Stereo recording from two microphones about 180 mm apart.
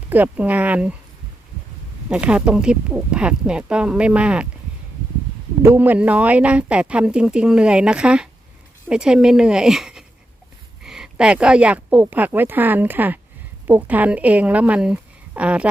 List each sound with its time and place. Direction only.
0.1 s speech: 10° right (ahead or behind)
2.0 s speech: 5° right (ahead or behind)
5.6 s speech: 10° right (ahead or behind)